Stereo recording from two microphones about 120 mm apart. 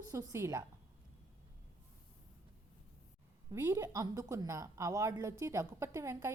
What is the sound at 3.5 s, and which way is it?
A woman's voice, 20° right (ahead or behind).